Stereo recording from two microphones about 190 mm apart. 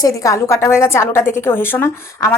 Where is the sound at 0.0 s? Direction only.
15° left (ahead or behind).